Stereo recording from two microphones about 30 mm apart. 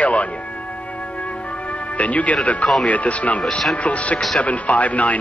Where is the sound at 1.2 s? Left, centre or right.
Left.